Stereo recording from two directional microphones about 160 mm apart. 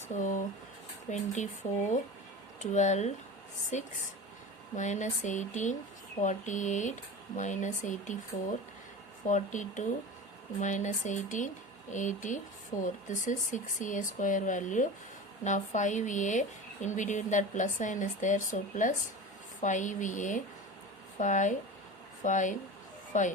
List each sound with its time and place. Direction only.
0.1 s speech: 55° left (ahead or behind)
2.6 s speech: 50° left (ahead or behind)